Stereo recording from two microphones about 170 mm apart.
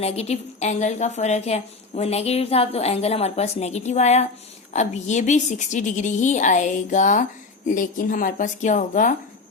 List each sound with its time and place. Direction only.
0.0 s a woman's voice: 40° left (ahead or behind)